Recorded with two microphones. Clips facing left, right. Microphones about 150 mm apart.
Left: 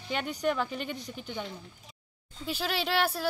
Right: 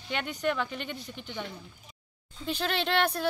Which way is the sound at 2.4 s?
5° left (ahead or behind).